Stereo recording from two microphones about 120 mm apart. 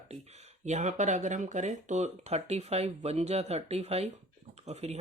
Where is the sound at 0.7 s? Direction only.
85° right.